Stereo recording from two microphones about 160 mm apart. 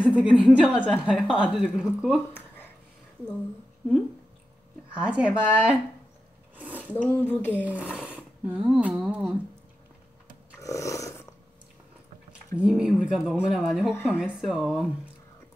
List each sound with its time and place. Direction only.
0.0 s speech: 5° right (ahead or behind)
2.3 s a sound: 10° left (ahead or behind)
5.0 s speech: 5° right (ahead or behind)
6.5 s a sound: 10° right (ahead or behind)
6.9 s speech: 10° left (ahead or behind)
7.5 s speech: 10° right (ahead or behind)
10.6 s roar: 20° left (ahead or behind)
12.3 s speech: 5° right (ahead or behind)